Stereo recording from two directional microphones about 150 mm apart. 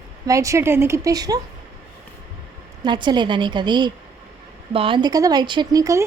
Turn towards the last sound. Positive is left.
turn(degrees=-20)  # may be behind; listen again after turning